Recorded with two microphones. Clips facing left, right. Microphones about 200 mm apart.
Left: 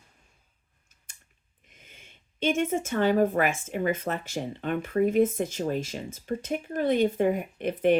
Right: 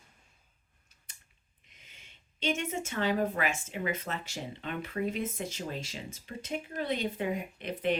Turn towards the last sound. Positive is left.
turn(degrees=50)  # may be behind; listen again after turning